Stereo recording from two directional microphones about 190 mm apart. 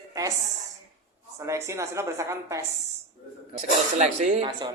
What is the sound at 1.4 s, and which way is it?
A woman's voice, 15° right (ahead or behind).